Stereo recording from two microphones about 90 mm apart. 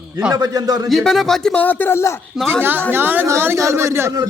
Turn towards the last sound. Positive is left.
turn(degrees=-30)  # may be behind; listen again after turning